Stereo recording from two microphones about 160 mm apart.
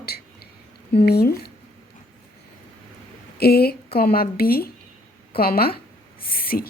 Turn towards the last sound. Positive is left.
turn(degrees=65)  # may be behind; listen again after turning